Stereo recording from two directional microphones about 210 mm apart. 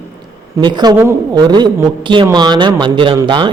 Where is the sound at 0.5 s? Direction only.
20° right (ahead or behind).